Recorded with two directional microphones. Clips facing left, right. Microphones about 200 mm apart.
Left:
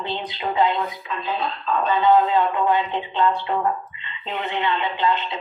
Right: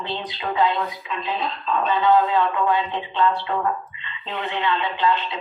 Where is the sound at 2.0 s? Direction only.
20° left (ahead or behind).